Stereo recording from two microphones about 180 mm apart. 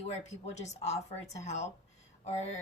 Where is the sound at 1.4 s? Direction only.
40° left (ahead or behind).